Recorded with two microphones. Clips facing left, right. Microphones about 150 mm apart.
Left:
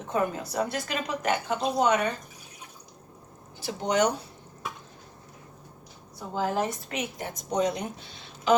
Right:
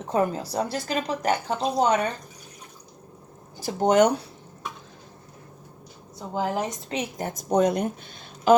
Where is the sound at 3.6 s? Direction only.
45° right (ahead or behind).